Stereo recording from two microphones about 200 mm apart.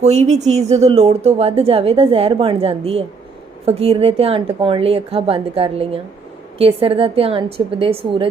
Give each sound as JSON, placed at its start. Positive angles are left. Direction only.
{"t": 0.0, "sound": "speech", "side_deg": -35}